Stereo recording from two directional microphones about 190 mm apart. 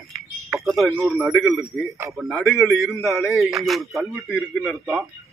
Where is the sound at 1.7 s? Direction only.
5° left (ahead or behind).